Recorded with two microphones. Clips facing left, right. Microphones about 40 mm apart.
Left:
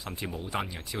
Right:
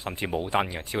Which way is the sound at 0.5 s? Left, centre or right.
Right.